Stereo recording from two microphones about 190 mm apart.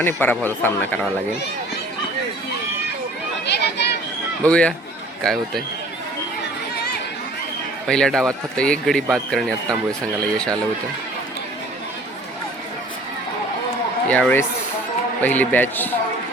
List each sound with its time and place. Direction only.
0.0 s speech: 10° left (ahead or behind)
3.4 s a sound: 60° left (ahead or behind)
4.4 s speech: 5° left (ahead or behind)
7.9 s speech: 5° left (ahead or behind)
14.1 s speech: 10° left (ahead or behind)